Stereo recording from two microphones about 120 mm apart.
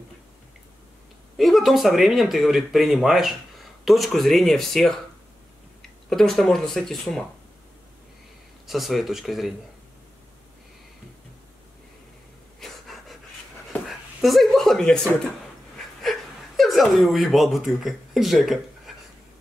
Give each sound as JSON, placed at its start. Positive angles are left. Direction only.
{"t": 1.3, "sound": "speech", "side_deg": 0}
{"t": 8.6, "sound": "speech", "side_deg": 0}
{"t": 12.5, "sound": "pant", "side_deg": 5}
{"t": 13.8, "sound": "speech", "side_deg": 0}
{"t": 16.0, "sound": "speech", "side_deg": 0}